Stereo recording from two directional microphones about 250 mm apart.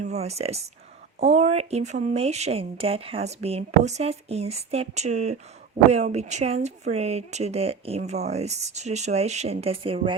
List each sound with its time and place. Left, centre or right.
0.0 s a woman's voice: right